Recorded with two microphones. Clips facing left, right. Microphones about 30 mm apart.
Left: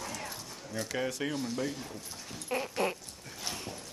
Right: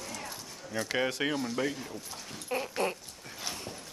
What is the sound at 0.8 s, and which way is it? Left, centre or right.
Speech, right.